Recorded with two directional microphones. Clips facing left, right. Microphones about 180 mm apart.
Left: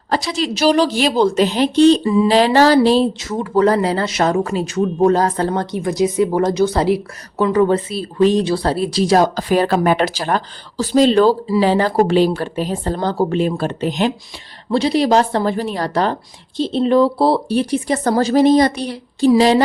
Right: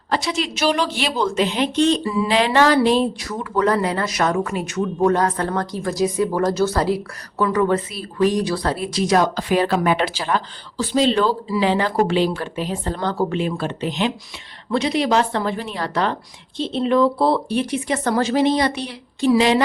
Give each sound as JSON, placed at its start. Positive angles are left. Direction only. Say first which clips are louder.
{"t": 0.1, "sound": "speech", "louder": "left 3 dB", "side_deg": 35}